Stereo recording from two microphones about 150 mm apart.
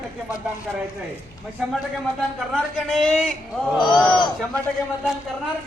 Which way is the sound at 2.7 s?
Centre (ahead or behind).